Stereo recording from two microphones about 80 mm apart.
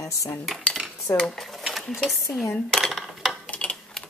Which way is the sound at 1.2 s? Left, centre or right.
Centre.